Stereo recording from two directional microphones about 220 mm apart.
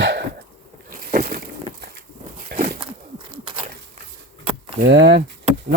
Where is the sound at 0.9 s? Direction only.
35° right (ahead or behind).